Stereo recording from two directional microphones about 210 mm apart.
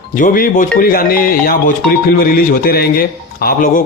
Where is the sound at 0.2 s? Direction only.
40° left (ahead or behind).